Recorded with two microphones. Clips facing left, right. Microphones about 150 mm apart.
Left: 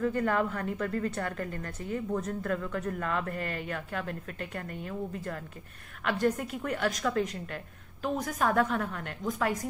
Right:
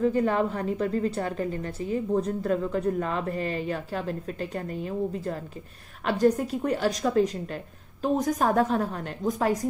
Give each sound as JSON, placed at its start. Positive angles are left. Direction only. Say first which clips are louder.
{"t": 0.0, "sound": "speech", "louder": "right 5 dB", "side_deg": -20}
{"t": 2.1, "sound": "speech", "louder": "right 8 dB", "side_deg": -30}
{"t": 6.0, "sound": "a woman's voice", "louder": "right 6 dB", "side_deg": -40}